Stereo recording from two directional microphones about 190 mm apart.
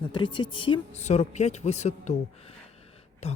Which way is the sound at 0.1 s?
25° left (ahead or behind).